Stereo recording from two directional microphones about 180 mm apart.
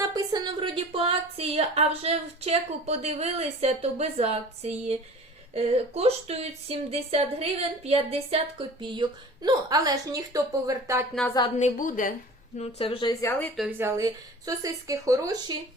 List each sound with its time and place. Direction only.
0.0 s a woman's voice: 20° right (ahead or behind)
11.6 s a woman's voice: 50° left (ahead or behind)
12.5 s a woman's voice: 30° left (ahead or behind)
13.7 s speech: 15° right (ahead or behind)